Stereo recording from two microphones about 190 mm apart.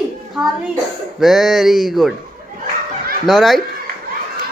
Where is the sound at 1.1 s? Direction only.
Centre (ahead or behind).